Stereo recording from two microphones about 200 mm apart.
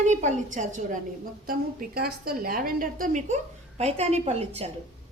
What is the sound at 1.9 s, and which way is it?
A woman's voice, 50° right (ahead or behind).